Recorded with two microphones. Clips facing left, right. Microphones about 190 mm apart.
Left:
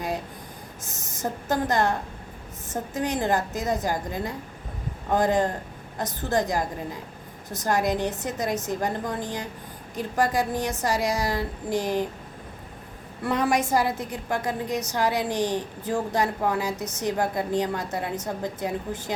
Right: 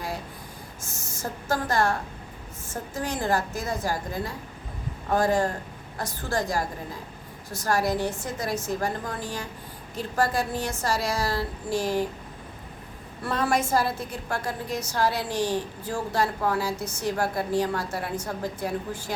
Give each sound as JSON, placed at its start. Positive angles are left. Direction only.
{"t": 0.8, "sound": "a woman's voice", "side_deg": 20}
{"t": 13.2, "sound": "a woman's voice", "side_deg": 15}